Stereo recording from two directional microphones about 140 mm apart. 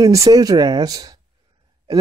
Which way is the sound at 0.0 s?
25° right (ahead or behind).